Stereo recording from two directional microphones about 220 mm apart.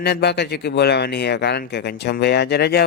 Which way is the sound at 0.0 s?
50° left (ahead or behind).